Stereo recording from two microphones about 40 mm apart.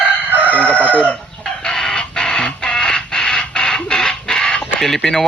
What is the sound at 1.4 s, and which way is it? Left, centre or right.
Chicken, centre.